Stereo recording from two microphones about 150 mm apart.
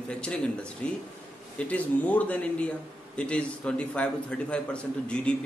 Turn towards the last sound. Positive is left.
turn(degrees=5)  # may be behind; listen again after turning